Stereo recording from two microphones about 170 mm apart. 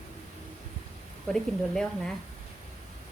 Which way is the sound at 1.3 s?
5° left (ahead or behind).